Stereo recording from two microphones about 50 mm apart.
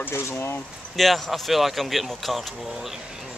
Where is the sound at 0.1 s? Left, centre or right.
Left.